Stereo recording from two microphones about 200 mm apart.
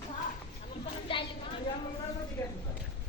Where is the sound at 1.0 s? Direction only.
25° left (ahead or behind).